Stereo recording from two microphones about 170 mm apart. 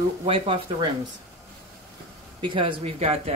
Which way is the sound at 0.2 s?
35° right (ahead or behind).